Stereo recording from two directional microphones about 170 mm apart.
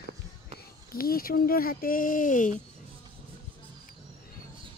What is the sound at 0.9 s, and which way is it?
Speech, 60° left (ahead or behind).